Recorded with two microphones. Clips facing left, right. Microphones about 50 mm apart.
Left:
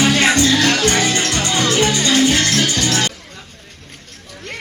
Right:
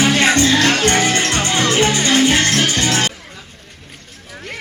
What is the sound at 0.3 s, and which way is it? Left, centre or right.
Music, right.